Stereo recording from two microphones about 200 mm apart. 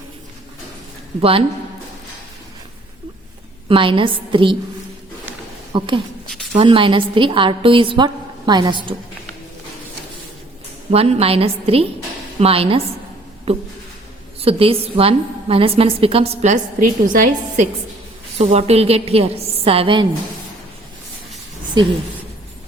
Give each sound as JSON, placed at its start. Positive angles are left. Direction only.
{"t": 1.2, "sound": "a woman's voice", "side_deg": -25}
{"t": 3.7, "sound": "a woman's voice", "side_deg": -25}
{"t": 5.7, "sound": "speech", "side_deg": -25}
{"t": 6.2, "sound": "a sound", "side_deg": 0}
{"t": 6.6, "sound": "a woman's voice", "side_deg": -25}
{"t": 10.9, "sound": "a woman's voice", "side_deg": -30}